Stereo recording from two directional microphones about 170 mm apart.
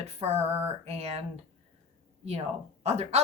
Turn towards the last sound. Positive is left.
turn(degrees=-40)  # may be behind; listen again after turning